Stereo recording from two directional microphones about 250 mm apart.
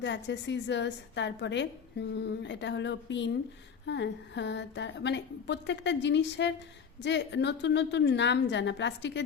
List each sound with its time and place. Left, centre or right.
0.0 s a woman's voice: left